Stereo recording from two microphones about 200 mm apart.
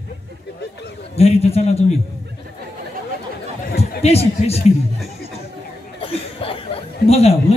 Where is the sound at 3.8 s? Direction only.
30° left (ahead or behind).